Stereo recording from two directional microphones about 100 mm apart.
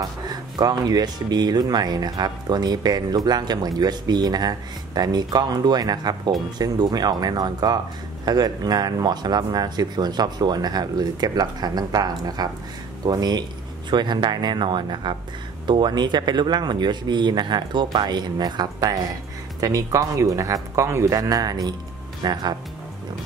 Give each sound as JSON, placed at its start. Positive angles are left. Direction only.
{"t": 0.3, "sound": "speech", "side_deg": -40}